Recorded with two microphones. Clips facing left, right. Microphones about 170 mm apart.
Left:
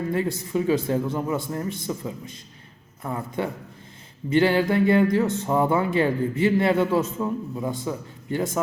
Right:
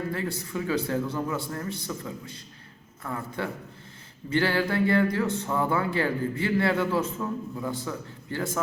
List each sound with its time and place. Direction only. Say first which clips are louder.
0.1 s a man's voice: left 6 dB; 20° left (ahead or behind)